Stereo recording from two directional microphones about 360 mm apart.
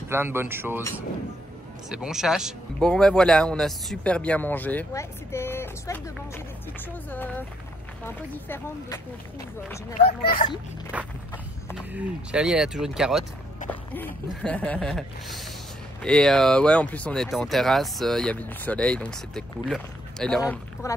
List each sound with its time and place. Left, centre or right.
0.1 s speech: centre
8.5 s speech: centre
10.2 s speech: left
11.7 s speech: centre